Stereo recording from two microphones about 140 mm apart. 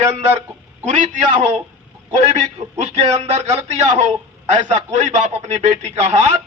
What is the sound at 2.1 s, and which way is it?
A man's voice, 55° right (ahead or behind).